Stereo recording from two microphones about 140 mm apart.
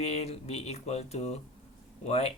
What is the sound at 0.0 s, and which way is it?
Speech, 50° left (ahead or behind).